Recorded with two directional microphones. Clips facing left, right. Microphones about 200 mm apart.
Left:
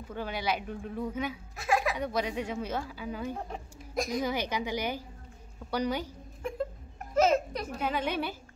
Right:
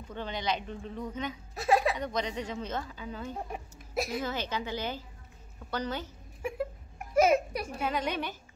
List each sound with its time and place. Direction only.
0.1 s a woman's voice: 5° left (ahead or behind)
1.5 s a sound: 35° right (ahead or behind)
2.0 s a woman's voice: 10° left (ahead or behind)
3.3 s speech: 10° right (ahead or behind)
4.2 s a woman's voice: 15° left (ahead or behind)
6.4 s a sound: 10° right (ahead or behind)
7.9 s a woman's voice: 5° left (ahead or behind)